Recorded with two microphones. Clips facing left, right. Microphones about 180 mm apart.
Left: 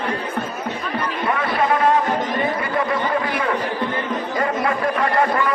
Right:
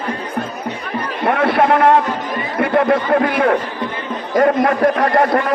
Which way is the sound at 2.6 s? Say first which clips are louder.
Right 7 dB; 60° right (ahead or behind).